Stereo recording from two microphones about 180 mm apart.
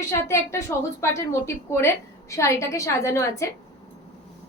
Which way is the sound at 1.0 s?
15° left (ahead or behind).